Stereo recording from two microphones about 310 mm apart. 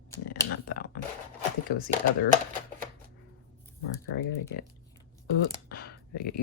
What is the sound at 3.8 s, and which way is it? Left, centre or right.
Speech, left.